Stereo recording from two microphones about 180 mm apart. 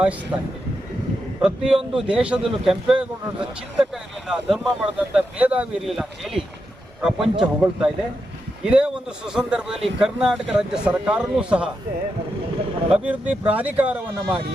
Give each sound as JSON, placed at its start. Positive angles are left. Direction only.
{"t": 1.4, "sound": "speech", "side_deg": -5}
{"t": 12.9, "sound": "speech", "side_deg": -5}